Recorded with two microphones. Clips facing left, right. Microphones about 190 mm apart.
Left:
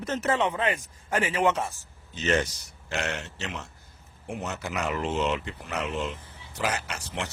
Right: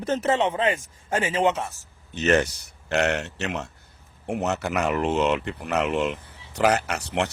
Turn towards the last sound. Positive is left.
turn(degrees=-70)  # may be behind; listen again after turning